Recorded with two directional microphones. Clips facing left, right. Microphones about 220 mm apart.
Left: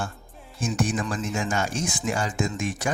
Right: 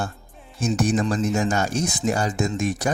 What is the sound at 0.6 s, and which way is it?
Speech, 40° right (ahead or behind).